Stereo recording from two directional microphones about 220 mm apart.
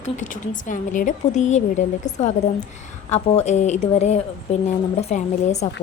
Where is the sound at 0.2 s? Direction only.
35° left (ahead or behind).